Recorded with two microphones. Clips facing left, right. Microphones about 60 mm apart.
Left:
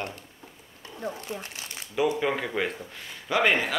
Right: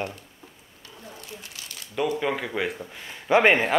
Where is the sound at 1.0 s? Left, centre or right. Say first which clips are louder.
Left 8 dB; left.